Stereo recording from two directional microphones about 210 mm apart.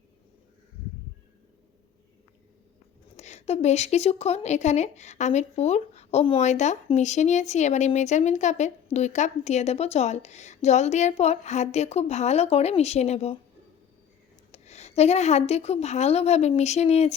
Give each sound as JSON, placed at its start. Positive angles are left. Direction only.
{"t": 3.2, "sound": "speech", "side_deg": 30}
{"t": 14.5, "sound": "speech", "side_deg": 30}